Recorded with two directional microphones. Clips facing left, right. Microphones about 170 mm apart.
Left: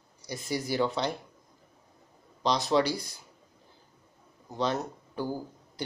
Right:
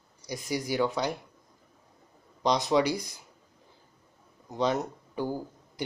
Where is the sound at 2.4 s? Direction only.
20° right (ahead or behind).